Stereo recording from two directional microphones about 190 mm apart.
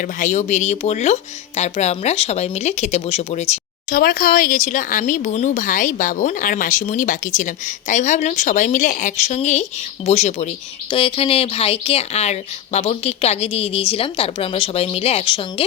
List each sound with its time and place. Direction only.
0.0 s speech: 40° left (ahead or behind)
3.9 s speech: 50° left (ahead or behind); by 15.6 s 25° left (ahead or behind)